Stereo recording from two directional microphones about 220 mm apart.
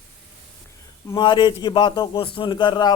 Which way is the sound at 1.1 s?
20° left (ahead or behind).